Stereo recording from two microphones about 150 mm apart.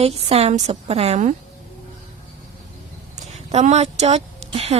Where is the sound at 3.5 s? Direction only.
45° right (ahead or behind).